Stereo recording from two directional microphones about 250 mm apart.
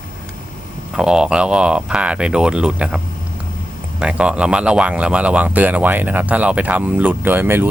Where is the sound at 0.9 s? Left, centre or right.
Centre.